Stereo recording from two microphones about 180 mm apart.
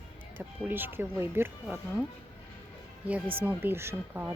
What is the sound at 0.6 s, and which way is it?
Speech, 10° right (ahead or behind).